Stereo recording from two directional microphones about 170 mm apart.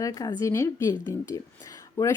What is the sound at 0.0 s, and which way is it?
A woman's voice, 20° left (ahead or behind).